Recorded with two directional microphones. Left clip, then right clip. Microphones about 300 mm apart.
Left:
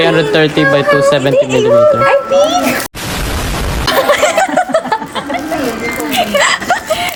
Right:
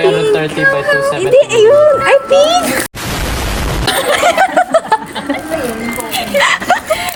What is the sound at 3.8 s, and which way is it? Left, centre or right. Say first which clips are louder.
Chuckle: left 1 dB; centre.